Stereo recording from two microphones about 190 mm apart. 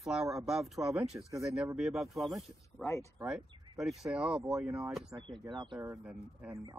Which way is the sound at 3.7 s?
Centre (ahead or behind).